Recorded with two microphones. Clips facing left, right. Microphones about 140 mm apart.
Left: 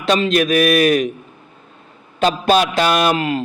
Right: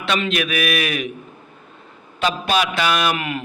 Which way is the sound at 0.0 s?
40° left (ahead or behind).